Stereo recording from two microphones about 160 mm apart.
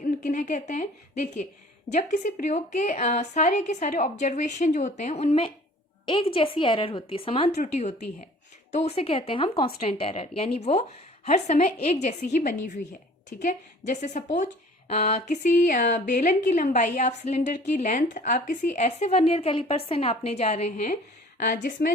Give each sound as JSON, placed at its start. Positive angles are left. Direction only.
{"t": 0.0, "sound": "a woman's voice", "side_deg": 50}
{"t": 7.6, "sound": "a woman's voice", "side_deg": 45}
{"t": 21.4, "sound": "a woman's voice", "side_deg": 55}